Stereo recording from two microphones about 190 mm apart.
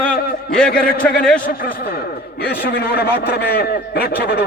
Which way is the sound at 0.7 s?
50° left (ahead or behind).